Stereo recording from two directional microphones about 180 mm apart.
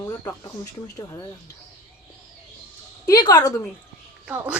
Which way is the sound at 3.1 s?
20° left (ahead or behind).